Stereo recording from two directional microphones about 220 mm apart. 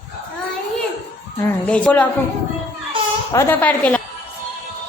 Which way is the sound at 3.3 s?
10° left (ahead or behind).